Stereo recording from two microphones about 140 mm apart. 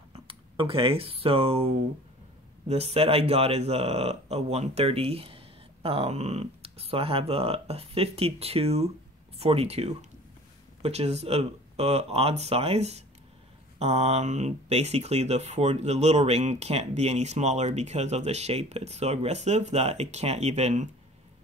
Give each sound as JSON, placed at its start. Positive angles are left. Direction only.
{"t": 0.1, "sound": "speech", "side_deg": -40}
{"t": 2.7, "sound": "speech", "side_deg": -45}